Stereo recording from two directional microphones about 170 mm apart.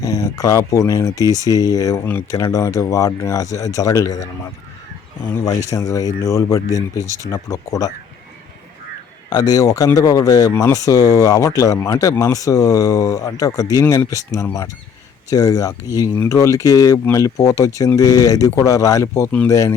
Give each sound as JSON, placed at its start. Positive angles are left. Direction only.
{"t": 0.0, "sound": "speech", "side_deg": 20}
{"t": 5.7, "sound": "speech", "side_deg": 20}
{"t": 7.0, "sound": "speech", "side_deg": -20}
{"t": 7.3, "sound": "speech", "side_deg": 20}
{"t": 9.3, "sound": "speech", "side_deg": 25}